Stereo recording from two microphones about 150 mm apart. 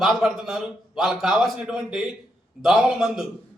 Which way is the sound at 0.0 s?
Centre (ahead or behind).